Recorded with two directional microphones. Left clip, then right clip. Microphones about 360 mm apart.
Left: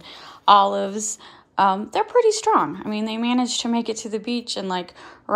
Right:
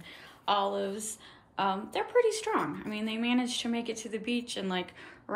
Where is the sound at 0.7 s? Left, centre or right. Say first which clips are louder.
Left 9 dB; centre.